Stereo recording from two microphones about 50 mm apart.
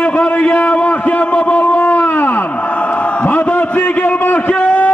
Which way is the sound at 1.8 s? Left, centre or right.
Left.